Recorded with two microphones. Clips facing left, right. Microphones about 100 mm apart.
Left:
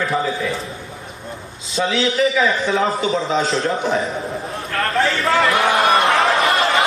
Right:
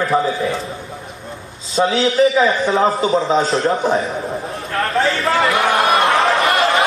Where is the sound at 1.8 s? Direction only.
30° right (ahead or behind).